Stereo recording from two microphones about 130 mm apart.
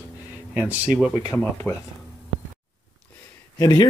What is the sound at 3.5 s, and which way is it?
Speech, 30° left (ahead or behind).